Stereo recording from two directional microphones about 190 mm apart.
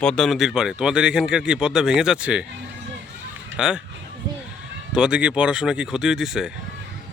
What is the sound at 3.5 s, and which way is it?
Speech, 5° right (ahead or behind).